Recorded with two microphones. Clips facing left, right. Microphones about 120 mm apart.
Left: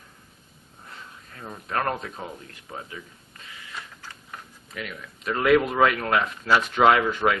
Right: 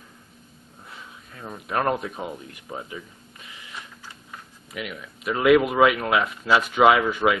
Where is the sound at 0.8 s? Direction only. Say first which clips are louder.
Even; 5° right (ahead or behind).